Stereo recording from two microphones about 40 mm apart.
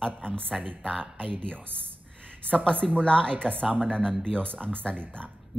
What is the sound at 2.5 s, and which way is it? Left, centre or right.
A woman's voice, left.